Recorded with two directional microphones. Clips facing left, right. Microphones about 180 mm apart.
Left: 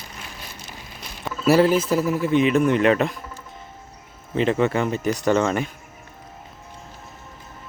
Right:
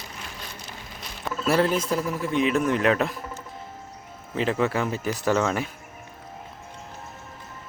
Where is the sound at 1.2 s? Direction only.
5° left (ahead or behind).